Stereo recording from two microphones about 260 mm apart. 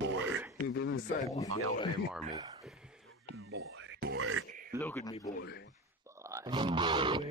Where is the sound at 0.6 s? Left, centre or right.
Left.